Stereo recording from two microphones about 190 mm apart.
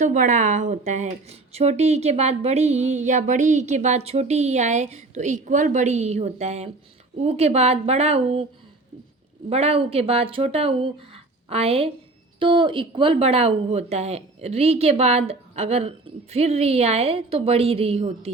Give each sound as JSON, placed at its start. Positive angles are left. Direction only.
{"t": 0.0, "sound": "speech", "side_deg": -40}
{"t": 9.5, "sound": "speech", "side_deg": -30}